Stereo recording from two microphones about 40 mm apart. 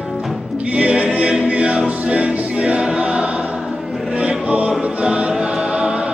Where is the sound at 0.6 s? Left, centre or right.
Right.